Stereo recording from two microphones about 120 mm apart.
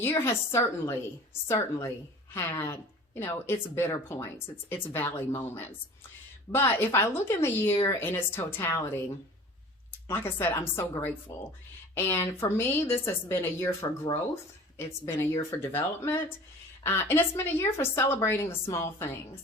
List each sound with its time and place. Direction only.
0.0 s a woman's voice: 20° left (ahead or behind)
7.7 s speech: 40° left (ahead or behind)
7.9 s a woman's voice: 15° left (ahead or behind)
10.1 s a woman's voice: 20° left (ahead or behind)
14.8 s a woman's voice: 25° left (ahead or behind)